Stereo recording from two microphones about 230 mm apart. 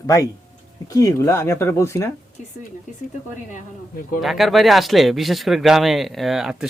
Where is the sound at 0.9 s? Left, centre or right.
Centre.